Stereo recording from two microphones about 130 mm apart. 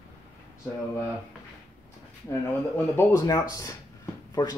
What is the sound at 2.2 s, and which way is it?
Speech, 20° left (ahead or behind).